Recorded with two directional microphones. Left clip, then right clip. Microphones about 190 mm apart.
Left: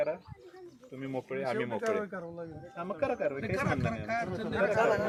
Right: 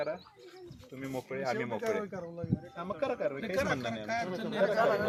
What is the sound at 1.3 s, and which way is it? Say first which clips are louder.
Speech: left 1 dB; 30° left (ahead or behind).